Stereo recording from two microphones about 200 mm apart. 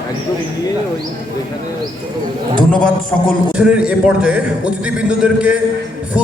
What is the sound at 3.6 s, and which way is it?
A man's voice, 5° right (ahead or behind).